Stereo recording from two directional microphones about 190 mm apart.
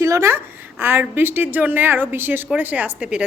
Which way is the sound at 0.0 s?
15° right (ahead or behind).